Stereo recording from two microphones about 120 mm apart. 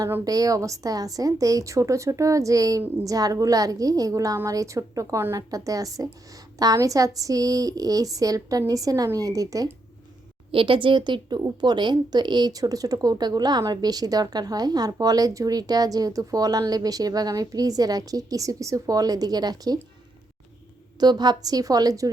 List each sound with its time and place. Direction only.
0.3 s a woman's voice: 30° right (ahead or behind)
10.5 s a woman's voice: 45° right (ahead or behind)
21.0 s a woman's voice: 35° right (ahead or behind)